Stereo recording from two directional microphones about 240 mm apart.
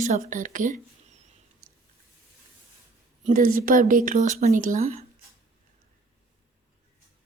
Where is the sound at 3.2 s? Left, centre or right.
Right.